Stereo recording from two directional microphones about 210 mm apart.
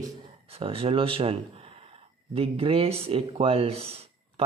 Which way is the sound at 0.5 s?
25° right (ahead or behind).